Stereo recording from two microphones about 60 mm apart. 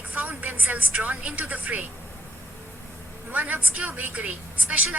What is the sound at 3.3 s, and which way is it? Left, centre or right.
Speech, right.